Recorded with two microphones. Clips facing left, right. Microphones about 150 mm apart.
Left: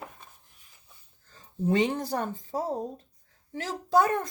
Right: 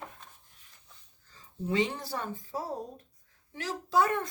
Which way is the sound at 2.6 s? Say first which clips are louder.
Left 8 dB; 20° left (ahead or behind).